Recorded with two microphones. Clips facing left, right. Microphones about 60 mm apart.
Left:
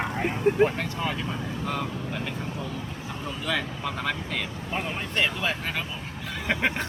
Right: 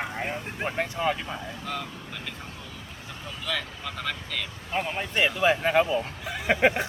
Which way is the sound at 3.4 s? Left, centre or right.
Centre.